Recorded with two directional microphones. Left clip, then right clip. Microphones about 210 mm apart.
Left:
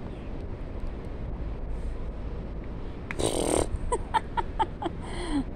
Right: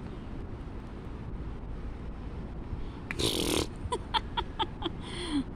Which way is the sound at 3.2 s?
50° right (ahead or behind).